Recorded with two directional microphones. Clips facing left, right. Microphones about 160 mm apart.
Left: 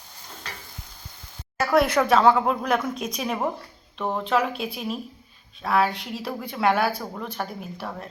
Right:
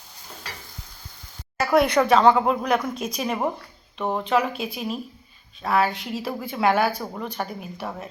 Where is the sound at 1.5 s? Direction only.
Centre (ahead or behind).